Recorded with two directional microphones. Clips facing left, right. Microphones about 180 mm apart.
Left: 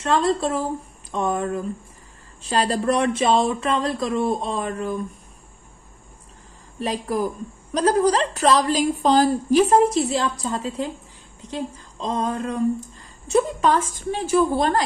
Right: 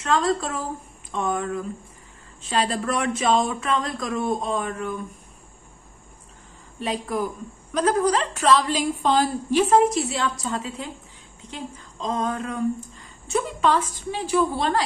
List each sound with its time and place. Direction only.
0.0 s a woman's voice: 35° left (ahead or behind)
6.8 s a woman's voice: 40° left (ahead or behind)